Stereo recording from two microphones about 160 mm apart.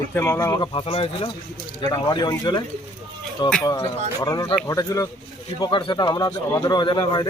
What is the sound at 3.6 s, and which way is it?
Speech, 20° left (ahead or behind).